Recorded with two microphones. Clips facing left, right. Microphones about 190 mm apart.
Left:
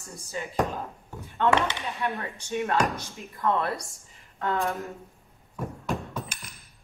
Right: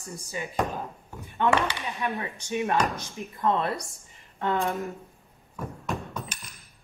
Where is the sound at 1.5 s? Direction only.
20° left (ahead or behind).